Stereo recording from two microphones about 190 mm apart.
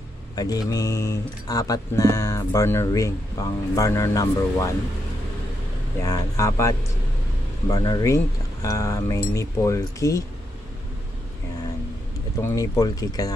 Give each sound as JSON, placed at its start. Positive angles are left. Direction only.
{"t": 0.4, "sound": "speech", "side_deg": 20}
{"t": 6.0, "sound": "speech", "side_deg": 15}
{"t": 7.7, "sound": "speech", "side_deg": 20}
{"t": 12.4, "sound": "speech", "side_deg": 15}